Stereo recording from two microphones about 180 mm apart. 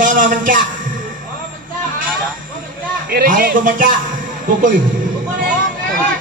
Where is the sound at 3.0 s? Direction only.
55° right (ahead or behind).